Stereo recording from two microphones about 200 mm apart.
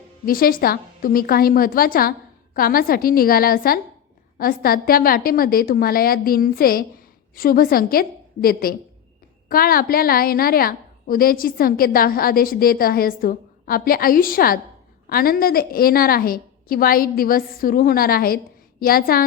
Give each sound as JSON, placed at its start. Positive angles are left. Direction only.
{"t": 0.3, "sound": "a woman's voice", "side_deg": 45}